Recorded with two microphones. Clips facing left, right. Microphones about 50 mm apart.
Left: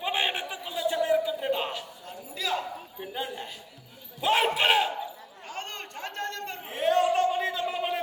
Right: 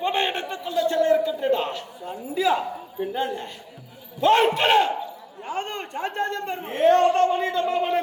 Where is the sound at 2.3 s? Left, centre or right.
Right.